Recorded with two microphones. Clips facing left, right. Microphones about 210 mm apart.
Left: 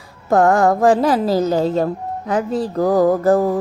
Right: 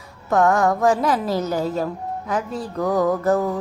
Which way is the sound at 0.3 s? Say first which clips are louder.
Left 4 dB; 30° left (ahead or behind).